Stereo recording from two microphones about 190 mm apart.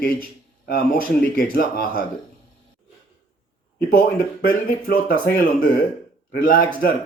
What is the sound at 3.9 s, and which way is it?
Speech, 50° left (ahead or behind).